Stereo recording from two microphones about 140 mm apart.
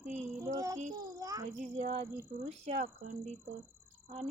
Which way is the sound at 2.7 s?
55° right (ahead or behind).